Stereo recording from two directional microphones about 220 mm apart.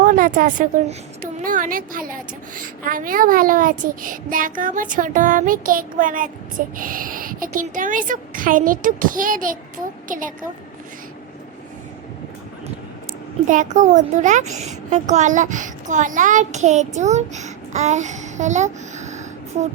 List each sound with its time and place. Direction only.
0.0 s a child's voice: 35° right (ahead or behind)
13.5 s a child's voice: 35° right (ahead or behind)